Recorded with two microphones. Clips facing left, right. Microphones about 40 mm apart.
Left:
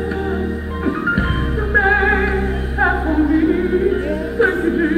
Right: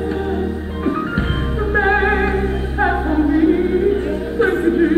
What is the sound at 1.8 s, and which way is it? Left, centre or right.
Music, centre.